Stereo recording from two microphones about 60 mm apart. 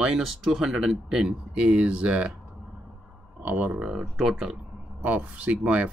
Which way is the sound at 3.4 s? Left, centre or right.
Right.